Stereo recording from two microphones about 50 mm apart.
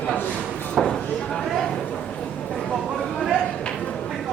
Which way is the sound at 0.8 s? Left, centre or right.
Centre.